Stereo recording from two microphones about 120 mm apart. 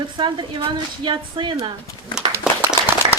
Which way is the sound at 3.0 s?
40° right (ahead or behind).